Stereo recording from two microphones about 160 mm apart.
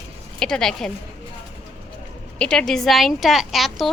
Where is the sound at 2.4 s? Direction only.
5° left (ahead or behind).